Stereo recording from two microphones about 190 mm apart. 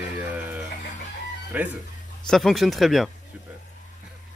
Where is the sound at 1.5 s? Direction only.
10° right (ahead or behind).